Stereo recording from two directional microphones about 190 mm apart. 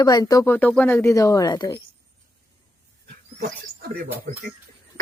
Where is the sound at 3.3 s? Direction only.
55° right (ahead or behind).